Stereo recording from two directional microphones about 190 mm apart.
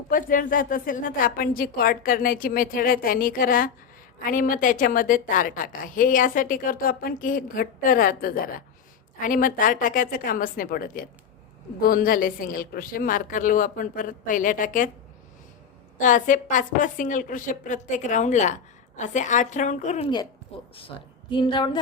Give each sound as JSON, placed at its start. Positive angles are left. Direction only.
{"t": 0.1, "sound": "a woman's voice", "side_deg": 45}
{"t": 16.0, "sound": "a woman's voice", "side_deg": 45}
{"t": 20.7, "sound": "a woman's voice", "side_deg": 25}